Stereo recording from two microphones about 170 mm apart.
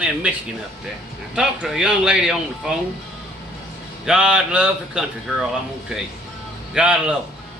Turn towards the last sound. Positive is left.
turn(degrees=-5)  # may be behind; listen again after turning